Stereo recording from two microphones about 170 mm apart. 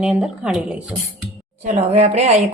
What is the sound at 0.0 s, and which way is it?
Speech, 5° right (ahead or behind).